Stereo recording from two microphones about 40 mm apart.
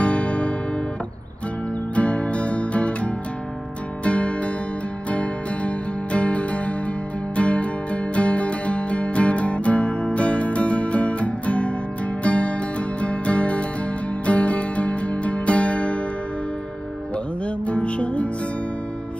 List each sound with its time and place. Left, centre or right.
0.0 s music: left
2.0 s music: left
17.6 s music: left